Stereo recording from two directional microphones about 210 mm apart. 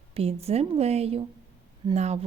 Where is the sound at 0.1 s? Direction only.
30° right (ahead or behind).